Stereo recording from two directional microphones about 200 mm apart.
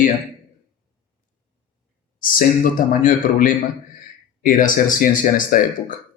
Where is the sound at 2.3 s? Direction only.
45° left (ahead or behind).